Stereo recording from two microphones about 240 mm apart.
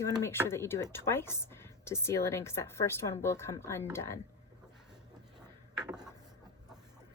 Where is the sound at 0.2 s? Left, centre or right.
Centre.